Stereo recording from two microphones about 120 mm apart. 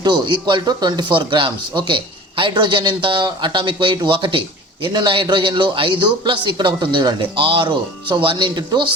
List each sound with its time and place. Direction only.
0.0 s speech: 40° right (ahead or behind)